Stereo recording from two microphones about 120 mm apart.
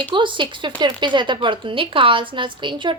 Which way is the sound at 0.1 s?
40° right (ahead or behind).